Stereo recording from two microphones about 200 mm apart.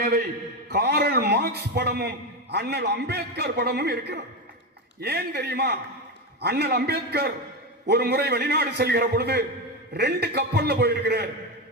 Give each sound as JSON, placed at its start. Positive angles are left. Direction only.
{"t": 0.7, "sound": "a man's voice", "side_deg": -50}